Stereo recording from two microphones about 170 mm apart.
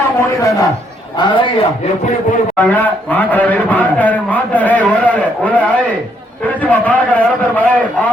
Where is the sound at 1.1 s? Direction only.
30° left (ahead or behind).